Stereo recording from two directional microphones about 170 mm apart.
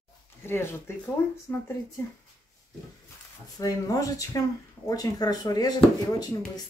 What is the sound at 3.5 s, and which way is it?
A woman's voice, 20° left (ahead or behind).